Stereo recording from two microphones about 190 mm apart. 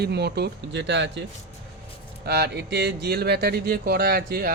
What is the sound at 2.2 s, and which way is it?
Speech, 60° right (ahead or behind).